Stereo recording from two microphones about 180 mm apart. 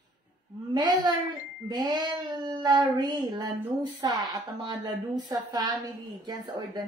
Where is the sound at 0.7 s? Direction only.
25° right (ahead or behind).